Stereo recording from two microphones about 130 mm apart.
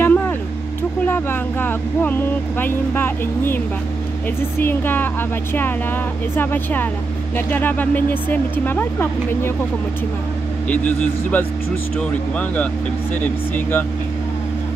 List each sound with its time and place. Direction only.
0.0 s a sound: 10° left (ahead or behind)
1.0 s speech: 15° left (ahead or behind)
10.7 s speech: 10° left (ahead or behind)